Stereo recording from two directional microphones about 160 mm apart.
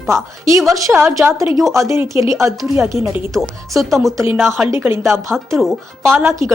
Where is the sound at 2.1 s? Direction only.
20° right (ahead or behind).